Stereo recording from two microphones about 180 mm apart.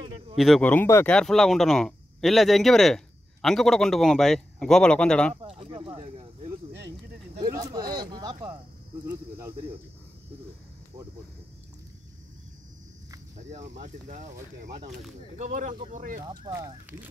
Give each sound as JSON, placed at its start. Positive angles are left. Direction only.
{"t": 0.4, "sound": "speech", "side_deg": 5}
{"t": 5.3, "sound": "speech", "side_deg": -35}
{"t": 7.7, "sound": "speech", "side_deg": -25}
{"t": 9.0, "sound": "speech", "side_deg": -10}
{"t": 13.4, "sound": "speech", "side_deg": -40}
{"t": 15.3, "sound": "speech", "side_deg": -45}
{"t": 16.3, "sound": "speech", "side_deg": -20}